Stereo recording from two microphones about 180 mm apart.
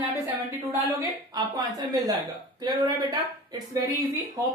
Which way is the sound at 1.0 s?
20° right (ahead or behind).